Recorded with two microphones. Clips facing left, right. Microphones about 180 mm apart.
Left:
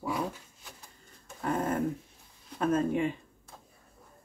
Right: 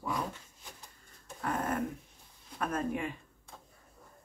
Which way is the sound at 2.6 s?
25° left (ahead or behind).